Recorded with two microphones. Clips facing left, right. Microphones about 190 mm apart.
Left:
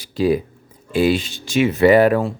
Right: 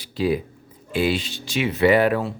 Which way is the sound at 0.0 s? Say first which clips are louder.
Left 4 dB; 45° left (ahead or behind).